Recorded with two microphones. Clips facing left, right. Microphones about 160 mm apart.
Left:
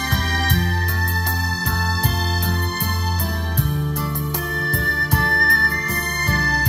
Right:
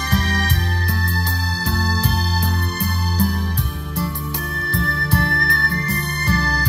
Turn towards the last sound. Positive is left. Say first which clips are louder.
# right 1 dB
turn(degrees=45)  # may be behind; listen again after turning